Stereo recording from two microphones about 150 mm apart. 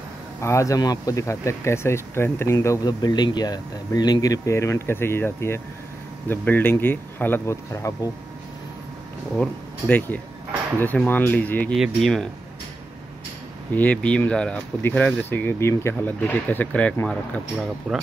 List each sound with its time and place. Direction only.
0.4 s speech: 20° left (ahead or behind)
9.4 s speech: 10° left (ahead or behind)
11.7 s speech: centre (ahead or behind)
13.7 s speech: 10° left (ahead or behind)
17.6 s speech: 5° right (ahead or behind)